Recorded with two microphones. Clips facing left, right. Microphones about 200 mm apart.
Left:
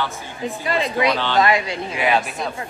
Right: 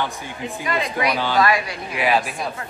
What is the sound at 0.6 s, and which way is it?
A woman's voice, 30° left (ahead or behind).